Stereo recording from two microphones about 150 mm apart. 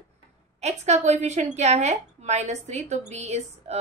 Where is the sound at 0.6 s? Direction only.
50° right (ahead or behind).